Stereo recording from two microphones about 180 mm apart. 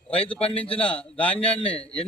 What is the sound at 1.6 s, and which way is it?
Speech, 30° left (ahead or behind).